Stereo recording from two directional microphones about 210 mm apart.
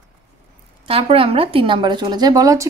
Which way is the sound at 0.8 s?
25° right (ahead or behind).